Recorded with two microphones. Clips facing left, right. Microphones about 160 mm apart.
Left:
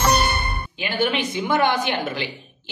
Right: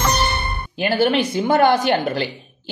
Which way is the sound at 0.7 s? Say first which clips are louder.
Right 6 dB; 40° right (ahead or behind).